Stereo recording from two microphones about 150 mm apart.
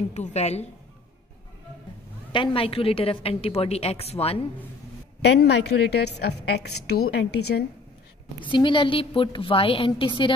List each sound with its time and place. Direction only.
0.1 s a woman's voice: 50° left (ahead or behind)
2.3 s a woman's voice: 35° left (ahead or behind)
5.2 s a woman's voice: 90° left
8.4 s a woman's voice: 30° left (ahead or behind)